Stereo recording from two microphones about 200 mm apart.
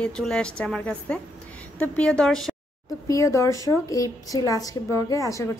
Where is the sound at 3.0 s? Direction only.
15° left (ahead or behind).